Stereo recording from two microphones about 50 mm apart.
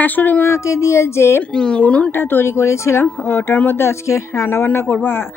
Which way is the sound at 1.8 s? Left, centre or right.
Left.